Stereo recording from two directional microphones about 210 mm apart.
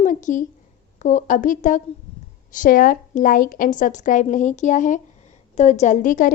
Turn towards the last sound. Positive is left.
turn(degrees=40)  # may be behind; listen again after turning